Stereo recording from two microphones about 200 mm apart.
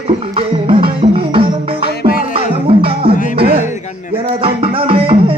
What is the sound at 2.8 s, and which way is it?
Music, 50° right (ahead or behind).